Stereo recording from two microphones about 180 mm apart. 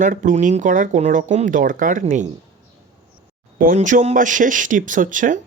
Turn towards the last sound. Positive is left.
turn(degrees=-45)  # may be behind; listen again after turning